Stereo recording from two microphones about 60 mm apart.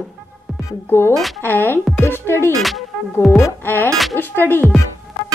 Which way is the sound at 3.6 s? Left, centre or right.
Left.